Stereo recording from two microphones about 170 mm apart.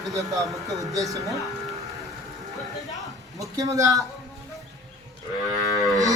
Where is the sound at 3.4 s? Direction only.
20° right (ahead or behind).